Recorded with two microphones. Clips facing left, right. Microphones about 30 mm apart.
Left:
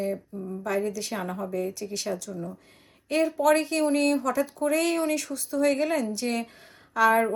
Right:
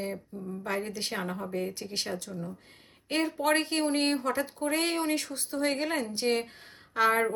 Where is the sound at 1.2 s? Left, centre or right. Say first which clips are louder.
Left 3 dB; centre.